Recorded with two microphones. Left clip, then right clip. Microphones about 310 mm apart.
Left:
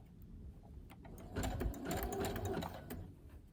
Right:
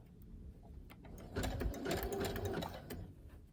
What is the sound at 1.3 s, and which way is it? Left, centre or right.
Sewing machine, centre.